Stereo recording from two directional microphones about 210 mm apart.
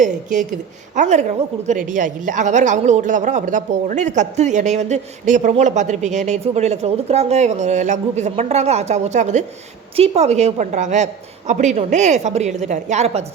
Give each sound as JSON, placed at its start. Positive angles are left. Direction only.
{"t": 0.0, "sound": "a woman's voice", "side_deg": -35}